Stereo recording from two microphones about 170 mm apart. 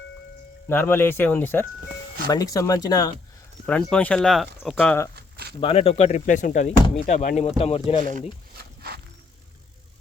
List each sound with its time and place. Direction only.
0.7 s speech: 10° left (ahead or behind)
3.7 s speech: 5° left (ahead or behind)
5.1 s a sound: 70° right (ahead or behind)
5.5 s speech: 35° left (ahead or behind)
8.5 s wild animals: 65° right (ahead or behind)